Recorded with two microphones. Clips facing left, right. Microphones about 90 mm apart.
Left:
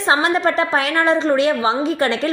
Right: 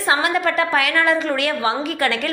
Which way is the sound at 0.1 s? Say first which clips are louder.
Left 2 dB; 30° left (ahead or behind).